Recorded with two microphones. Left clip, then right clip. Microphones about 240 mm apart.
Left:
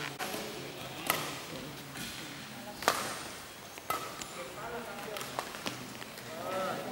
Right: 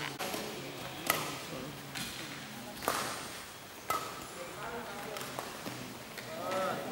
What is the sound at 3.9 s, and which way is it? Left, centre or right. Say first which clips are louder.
Chop: right 1 dB; centre.